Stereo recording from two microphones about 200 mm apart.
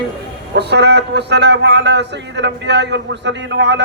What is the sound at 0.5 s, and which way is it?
A man's voice, 55° right (ahead or behind).